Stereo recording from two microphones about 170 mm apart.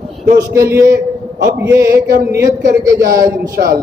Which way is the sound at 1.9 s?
65° right (ahead or behind).